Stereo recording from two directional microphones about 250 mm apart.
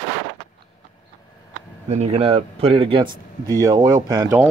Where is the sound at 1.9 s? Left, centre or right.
Right.